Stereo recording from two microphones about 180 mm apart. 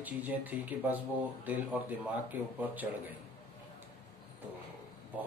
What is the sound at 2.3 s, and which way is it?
Speech, 10° right (ahead or behind).